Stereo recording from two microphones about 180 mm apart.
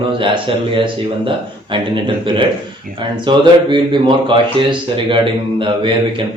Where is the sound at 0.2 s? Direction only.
30° right (ahead or behind).